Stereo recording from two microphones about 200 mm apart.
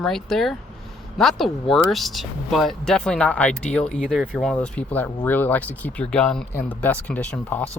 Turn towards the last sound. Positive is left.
turn(degrees=5)  # may be behind; listen again after turning